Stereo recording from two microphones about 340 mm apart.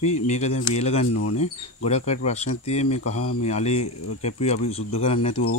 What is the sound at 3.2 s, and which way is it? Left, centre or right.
Speech, left.